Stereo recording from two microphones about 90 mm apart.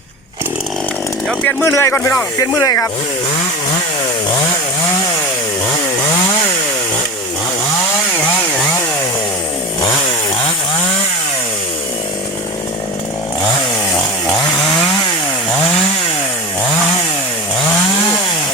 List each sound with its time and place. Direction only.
1.3 s speech: 15° left (ahead or behind)
1.6 s speech: 30° left (ahead or behind)